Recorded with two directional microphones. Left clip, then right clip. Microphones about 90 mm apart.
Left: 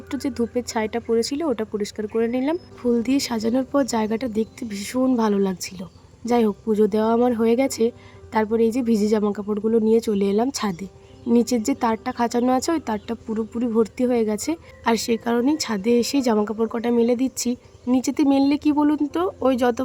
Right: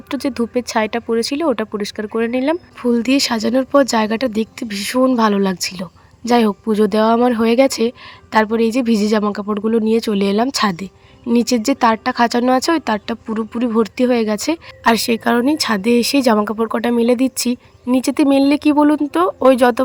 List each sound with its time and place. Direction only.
0.1 s speech: 30° right (ahead or behind)